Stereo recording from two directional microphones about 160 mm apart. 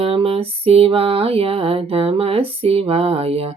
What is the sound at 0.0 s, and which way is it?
Speech, 35° right (ahead or behind).